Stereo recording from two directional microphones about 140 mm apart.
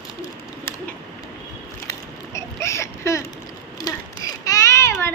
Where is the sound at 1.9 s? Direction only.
20° left (ahead or behind).